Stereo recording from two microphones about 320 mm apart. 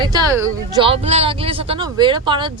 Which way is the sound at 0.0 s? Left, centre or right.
Centre.